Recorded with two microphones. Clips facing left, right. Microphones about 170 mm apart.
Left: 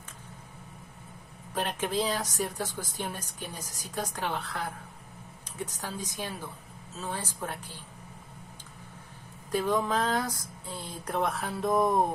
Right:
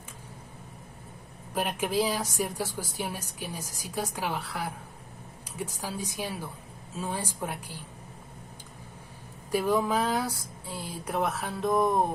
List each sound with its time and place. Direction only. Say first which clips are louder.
1.5 s speech: right 2 dB; 10° right (ahead or behind)
9.5 s speech: right 2 dB; 10° right (ahead or behind)